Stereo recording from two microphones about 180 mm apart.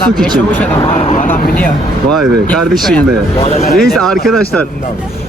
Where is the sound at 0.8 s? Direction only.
30° left (ahead or behind).